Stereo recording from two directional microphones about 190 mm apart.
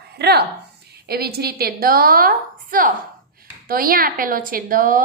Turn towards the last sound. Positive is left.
turn(degrees=-45)  # may be behind; listen again after turning